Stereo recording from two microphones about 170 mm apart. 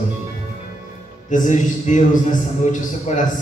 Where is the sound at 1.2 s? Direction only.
50° left (ahead or behind).